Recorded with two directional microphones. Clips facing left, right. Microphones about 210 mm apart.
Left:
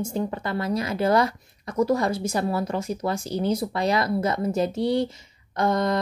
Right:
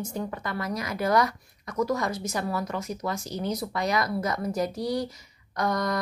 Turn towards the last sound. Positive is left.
turn(degrees=25)  # may be behind; listen again after turning